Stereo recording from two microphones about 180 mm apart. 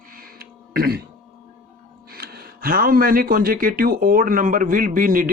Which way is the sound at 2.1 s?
60° right (ahead or behind).